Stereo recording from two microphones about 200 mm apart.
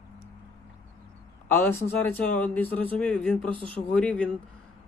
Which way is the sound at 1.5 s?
10° left (ahead or behind).